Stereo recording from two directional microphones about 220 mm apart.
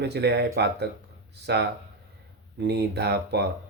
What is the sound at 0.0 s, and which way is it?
Speech, 50° right (ahead or behind).